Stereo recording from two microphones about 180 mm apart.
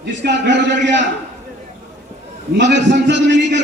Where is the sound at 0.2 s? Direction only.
65° right (ahead or behind).